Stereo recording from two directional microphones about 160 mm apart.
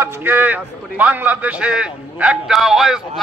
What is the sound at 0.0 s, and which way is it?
A man's voice, 15° right (ahead or behind).